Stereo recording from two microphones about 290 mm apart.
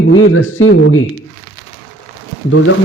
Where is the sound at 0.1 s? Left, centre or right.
Left.